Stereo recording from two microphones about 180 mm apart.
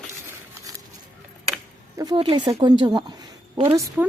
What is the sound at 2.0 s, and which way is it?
Speech, 25° right (ahead or behind).